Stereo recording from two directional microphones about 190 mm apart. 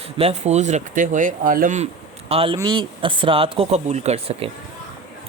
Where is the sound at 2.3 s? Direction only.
30° right (ahead or behind).